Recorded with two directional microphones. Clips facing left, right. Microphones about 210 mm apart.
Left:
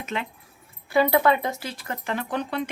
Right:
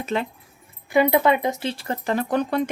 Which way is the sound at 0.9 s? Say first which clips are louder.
Right 2 dB; 20° right (ahead or behind).